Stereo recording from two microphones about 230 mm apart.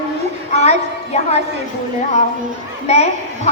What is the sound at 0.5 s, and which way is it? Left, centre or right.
Speech, left.